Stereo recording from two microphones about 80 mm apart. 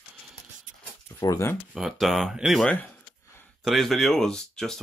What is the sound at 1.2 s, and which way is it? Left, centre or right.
Speech, left.